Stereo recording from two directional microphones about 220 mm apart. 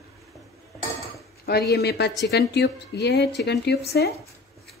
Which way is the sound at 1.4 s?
45° left (ahead or behind).